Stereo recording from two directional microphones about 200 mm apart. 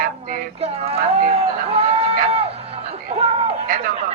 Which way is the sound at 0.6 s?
30° right (ahead or behind).